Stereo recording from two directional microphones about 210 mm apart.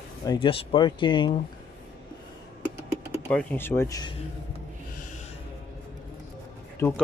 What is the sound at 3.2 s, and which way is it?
Speech, 10° left (ahead or behind).